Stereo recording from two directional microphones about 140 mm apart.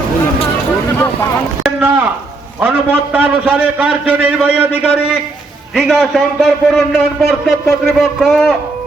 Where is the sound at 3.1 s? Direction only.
10° right (ahead or behind).